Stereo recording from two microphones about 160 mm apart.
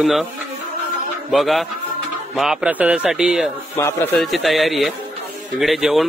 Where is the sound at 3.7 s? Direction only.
15° left (ahead or behind).